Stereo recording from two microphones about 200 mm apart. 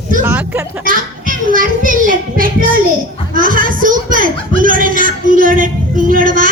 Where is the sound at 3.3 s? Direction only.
45° right (ahead or behind).